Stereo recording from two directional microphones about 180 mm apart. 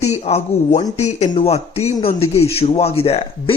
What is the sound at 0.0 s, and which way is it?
Speech, 35° left (ahead or behind).